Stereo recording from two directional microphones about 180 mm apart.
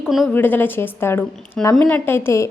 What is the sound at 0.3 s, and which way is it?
A woman's voice, 10° left (ahead or behind).